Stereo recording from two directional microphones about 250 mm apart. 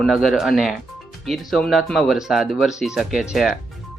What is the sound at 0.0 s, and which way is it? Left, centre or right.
Speech, centre.